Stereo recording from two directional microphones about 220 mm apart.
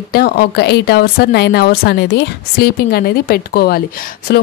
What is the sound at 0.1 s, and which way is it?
Speech, 45° left (ahead or behind).